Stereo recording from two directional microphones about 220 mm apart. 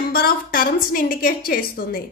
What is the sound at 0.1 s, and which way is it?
A woman's voice, 40° left (ahead or behind).